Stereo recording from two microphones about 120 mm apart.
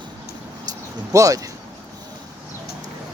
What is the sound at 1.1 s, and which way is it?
Speech, 30° right (ahead or behind).